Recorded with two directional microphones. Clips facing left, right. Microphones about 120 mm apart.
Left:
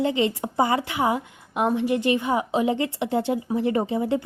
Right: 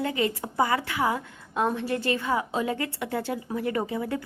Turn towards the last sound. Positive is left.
turn(degrees=25)  # may be behind; listen again after turning